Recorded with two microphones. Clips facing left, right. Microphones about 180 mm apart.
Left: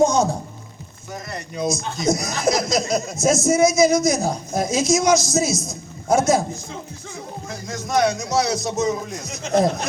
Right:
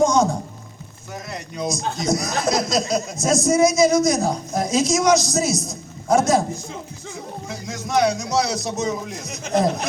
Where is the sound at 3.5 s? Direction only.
20° left (ahead or behind).